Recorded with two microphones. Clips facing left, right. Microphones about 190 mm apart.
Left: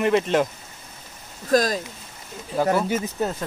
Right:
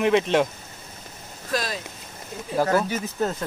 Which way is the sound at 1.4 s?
45° left (ahead or behind).